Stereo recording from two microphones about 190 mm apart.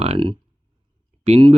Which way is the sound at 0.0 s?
30° right (ahead or behind).